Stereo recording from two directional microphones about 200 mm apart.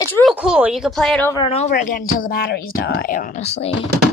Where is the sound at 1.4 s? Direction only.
35° left (ahead or behind).